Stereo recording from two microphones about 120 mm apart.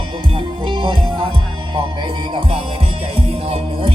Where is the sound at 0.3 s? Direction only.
45° right (ahead or behind).